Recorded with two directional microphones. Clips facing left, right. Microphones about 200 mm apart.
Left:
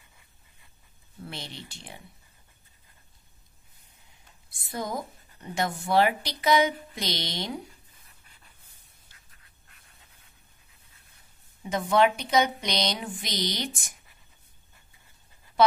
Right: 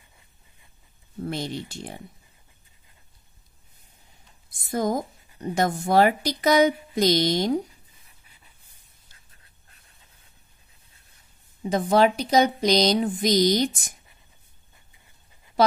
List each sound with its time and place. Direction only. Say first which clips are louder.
1.2 s speech: right 11 dB; 45° right (ahead or behind)
4.5 s a woman's voice: right 8 dB; 45° right (ahead or behind)
11.6 s a woman's voice: right 3 dB; 35° right (ahead or behind)